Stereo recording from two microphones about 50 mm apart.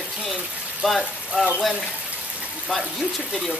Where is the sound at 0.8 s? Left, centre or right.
Centre.